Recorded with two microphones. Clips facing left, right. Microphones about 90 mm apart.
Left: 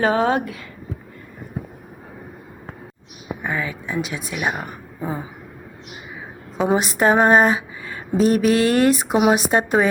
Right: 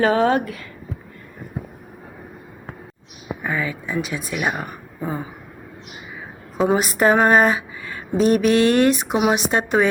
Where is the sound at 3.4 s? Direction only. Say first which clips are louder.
Right 1 dB; 15° left (ahead or behind).